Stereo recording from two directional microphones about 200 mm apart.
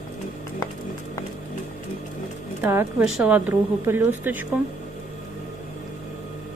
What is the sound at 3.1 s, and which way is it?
A woman's voice, 5° right (ahead or behind).